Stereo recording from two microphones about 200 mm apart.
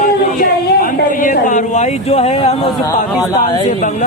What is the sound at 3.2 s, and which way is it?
Speech, 20° left (ahead or behind).